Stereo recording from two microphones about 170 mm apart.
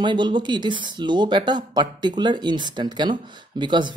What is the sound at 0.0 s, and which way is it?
Speech, 25° right (ahead or behind).